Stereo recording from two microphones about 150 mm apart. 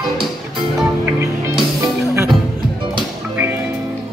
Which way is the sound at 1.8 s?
20° right (ahead or behind).